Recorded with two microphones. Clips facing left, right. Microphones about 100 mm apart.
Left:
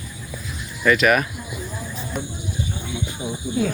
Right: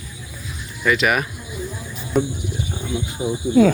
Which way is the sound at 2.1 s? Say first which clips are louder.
Right 12 dB; centre (ahead or behind).